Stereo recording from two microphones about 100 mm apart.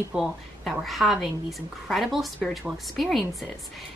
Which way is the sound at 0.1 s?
5° right (ahead or behind).